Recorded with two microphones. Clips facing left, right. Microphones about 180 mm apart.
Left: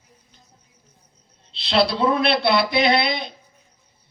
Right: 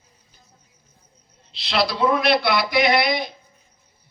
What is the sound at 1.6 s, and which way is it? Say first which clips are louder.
A man's voice: left 2 dB; 30° left (ahead or behind).